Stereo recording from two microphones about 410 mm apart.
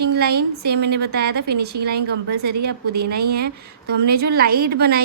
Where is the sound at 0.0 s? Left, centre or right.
Right.